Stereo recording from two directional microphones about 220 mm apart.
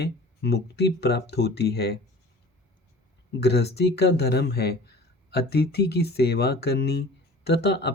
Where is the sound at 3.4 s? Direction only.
50° left (ahead or behind).